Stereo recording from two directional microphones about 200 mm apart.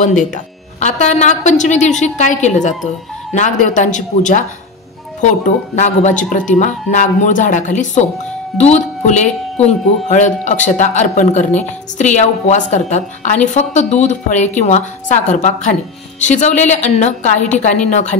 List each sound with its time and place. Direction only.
0.0 s speech: 40° left (ahead or behind)